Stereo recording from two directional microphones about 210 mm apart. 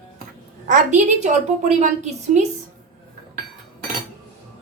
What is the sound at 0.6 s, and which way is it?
A woman's voice, 35° right (ahead or behind).